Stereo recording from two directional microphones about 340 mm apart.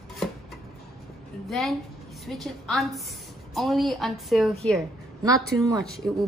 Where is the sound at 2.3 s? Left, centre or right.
Centre.